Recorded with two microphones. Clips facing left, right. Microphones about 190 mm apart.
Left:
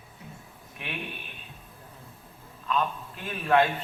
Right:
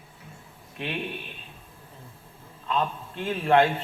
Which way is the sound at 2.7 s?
25° right (ahead or behind).